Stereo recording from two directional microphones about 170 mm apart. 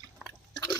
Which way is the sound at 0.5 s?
25° left (ahead or behind).